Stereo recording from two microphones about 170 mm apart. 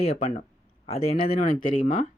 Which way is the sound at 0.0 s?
45° left (ahead or behind).